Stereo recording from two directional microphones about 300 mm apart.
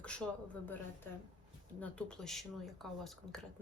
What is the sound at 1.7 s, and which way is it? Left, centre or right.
Speech, centre.